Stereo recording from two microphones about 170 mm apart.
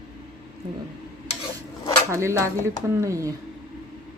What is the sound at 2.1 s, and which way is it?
Speech, 15° right (ahead or behind).